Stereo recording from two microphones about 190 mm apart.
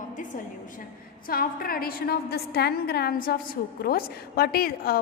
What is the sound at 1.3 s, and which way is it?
A woman's voice, 50° left (ahead or behind).